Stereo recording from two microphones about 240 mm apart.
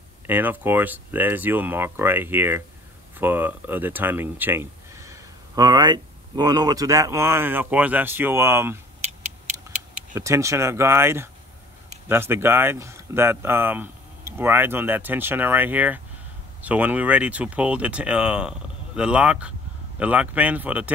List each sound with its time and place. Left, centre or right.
0.3 s speech: centre
9.0 s a sound: right
10.1 s speech: centre